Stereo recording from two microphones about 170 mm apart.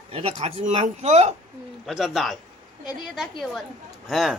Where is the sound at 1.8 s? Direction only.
Centre (ahead or behind).